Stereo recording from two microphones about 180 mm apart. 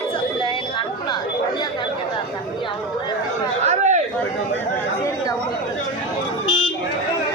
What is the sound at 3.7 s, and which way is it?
Chatter, 40° right (ahead or behind).